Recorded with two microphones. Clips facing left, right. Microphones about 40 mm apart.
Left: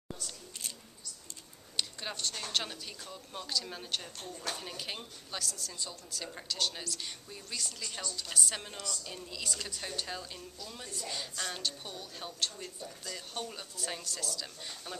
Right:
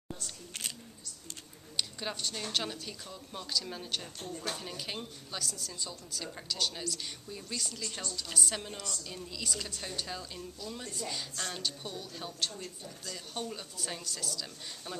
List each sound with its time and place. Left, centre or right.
0.5 s single-lens reflex camera: right
1.8 s a woman's voice: centre